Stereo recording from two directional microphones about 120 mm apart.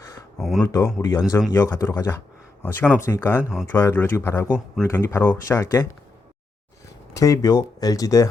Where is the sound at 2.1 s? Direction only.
20° left (ahead or behind).